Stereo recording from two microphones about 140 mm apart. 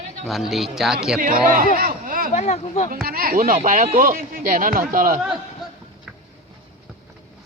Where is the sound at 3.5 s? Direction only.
70° right (ahead or behind).